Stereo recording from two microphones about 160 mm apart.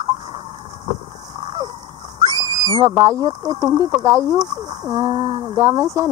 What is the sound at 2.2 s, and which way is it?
Speech, 25° right (ahead or behind).